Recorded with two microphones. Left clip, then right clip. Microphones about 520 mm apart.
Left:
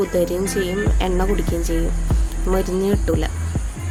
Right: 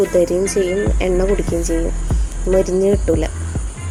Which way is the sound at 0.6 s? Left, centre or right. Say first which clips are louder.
Right 4 dB; left.